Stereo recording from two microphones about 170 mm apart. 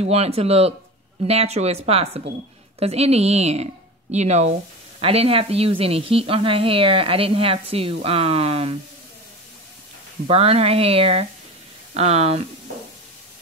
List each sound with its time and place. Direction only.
0.0 s speech: 35° right (ahead or behind)
10.2 s speech: 35° right (ahead or behind)